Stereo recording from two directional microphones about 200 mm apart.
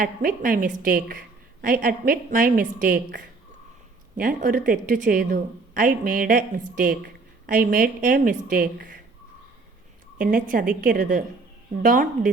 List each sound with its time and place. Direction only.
0.0 s a woman's voice: 45° right (ahead or behind)
4.2 s a woman's voice: 40° right (ahead or behind)
10.2 s a woman's voice: 45° right (ahead or behind)